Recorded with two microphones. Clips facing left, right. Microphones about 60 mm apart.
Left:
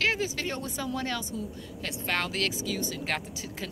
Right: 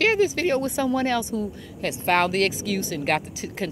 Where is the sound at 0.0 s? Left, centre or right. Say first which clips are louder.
Right 8 dB; right.